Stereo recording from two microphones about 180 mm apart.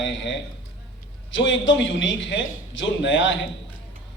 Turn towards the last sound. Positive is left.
turn(degrees=90)